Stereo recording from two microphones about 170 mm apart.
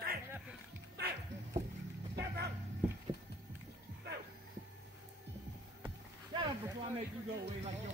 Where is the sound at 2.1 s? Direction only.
70° right (ahead or behind).